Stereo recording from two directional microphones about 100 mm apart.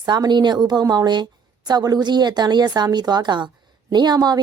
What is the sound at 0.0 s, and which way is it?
A woman's voice, 45° right (ahead or behind).